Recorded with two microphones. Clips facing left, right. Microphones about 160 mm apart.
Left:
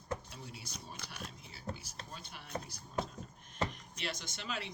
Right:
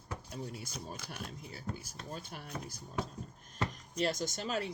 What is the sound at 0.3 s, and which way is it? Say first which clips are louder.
Speech: right 7 dB; 45° right (ahead or behind).